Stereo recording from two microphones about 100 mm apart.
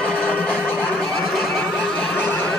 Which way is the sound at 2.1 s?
20° left (ahead or behind).